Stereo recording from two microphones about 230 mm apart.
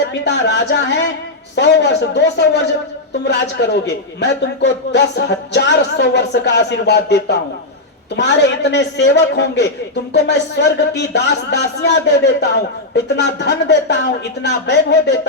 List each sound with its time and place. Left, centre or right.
0.0 s a man's voice: left
3.7 s a man's voice: left